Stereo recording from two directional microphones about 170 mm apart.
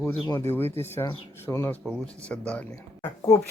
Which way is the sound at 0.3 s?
15° left (ahead or behind).